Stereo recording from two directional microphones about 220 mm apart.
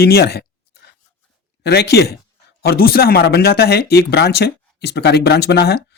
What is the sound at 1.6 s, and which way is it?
Speech, 50° left (ahead or behind).